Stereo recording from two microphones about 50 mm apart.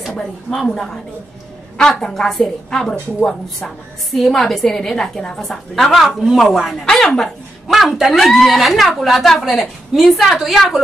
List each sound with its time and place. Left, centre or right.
0.2 s a woman's voice: centre
5.4 s a woman's voice: centre
6.9 s speech: centre
7.6 s a man's voice: centre